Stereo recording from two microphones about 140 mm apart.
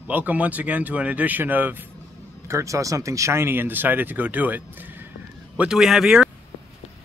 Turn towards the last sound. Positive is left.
turn(degrees=-5)  # may be behind; listen again after turning